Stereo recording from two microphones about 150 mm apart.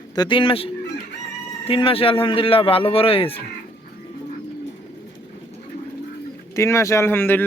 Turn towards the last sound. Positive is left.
turn(degrees=15)  # may be behind; listen again after turning